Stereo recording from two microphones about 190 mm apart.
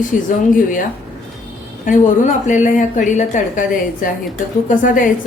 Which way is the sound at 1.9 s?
40° left (ahead or behind).